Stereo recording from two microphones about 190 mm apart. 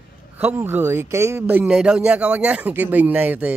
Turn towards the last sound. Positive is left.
turn(degrees=-10)  # may be behind; listen again after turning